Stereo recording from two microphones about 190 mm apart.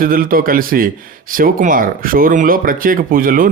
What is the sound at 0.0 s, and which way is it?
Speech, 50° right (ahead or behind).